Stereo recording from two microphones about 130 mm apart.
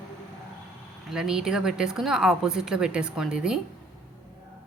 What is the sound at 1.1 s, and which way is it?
A woman's voice, 5° right (ahead or behind).